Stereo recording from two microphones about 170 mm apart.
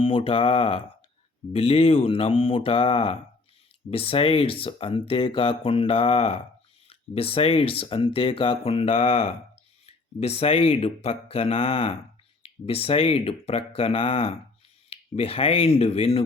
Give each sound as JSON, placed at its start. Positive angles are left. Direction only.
{"t": 0.0, "sound": "speech", "side_deg": 30}